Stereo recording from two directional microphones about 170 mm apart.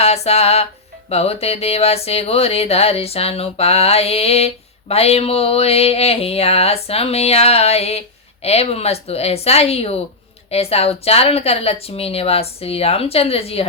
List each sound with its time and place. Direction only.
0.0 s speech: 35° left (ahead or behind)